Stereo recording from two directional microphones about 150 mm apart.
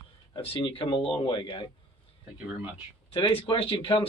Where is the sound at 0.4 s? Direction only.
35° left (ahead or behind).